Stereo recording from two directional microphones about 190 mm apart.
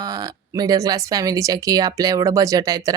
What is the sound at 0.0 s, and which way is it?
Speech, 20° right (ahead or behind).